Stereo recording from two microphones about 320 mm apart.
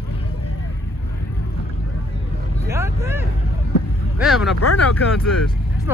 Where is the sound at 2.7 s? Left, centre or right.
Centre.